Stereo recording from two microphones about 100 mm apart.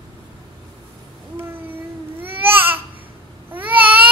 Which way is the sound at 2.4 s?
20° right (ahead or behind).